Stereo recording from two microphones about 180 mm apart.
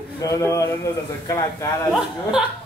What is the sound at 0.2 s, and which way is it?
A man's voice, 15° left (ahead or behind).